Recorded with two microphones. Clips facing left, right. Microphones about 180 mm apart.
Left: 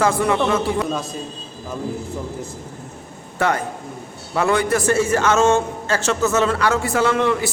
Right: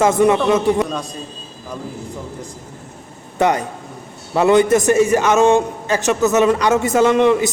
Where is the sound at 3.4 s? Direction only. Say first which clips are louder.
Right 4 dB; 20° right (ahead or behind).